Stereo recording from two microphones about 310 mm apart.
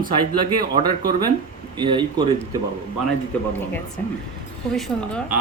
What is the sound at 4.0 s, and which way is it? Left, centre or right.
Speech, centre.